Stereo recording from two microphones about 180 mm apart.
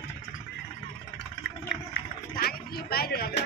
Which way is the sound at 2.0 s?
60° left (ahead or behind).